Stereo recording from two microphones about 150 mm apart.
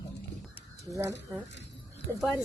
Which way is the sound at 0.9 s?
20° right (ahead or behind).